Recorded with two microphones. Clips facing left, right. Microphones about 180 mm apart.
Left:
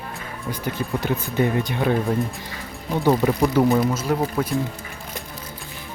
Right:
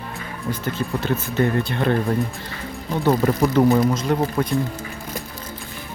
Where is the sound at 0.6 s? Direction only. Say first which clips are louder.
Left 1 dB; 15° left (ahead or behind).